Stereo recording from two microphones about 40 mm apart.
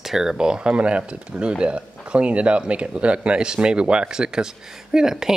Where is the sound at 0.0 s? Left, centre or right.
Centre.